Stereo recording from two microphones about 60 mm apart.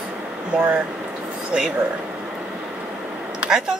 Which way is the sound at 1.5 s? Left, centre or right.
Centre.